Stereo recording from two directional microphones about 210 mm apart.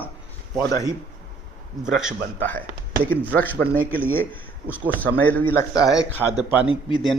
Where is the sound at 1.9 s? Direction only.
5° right (ahead or behind).